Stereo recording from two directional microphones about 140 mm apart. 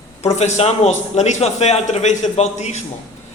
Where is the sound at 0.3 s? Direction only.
50° left (ahead or behind).